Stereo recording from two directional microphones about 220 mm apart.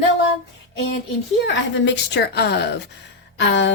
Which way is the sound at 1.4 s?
55° left (ahead or behind).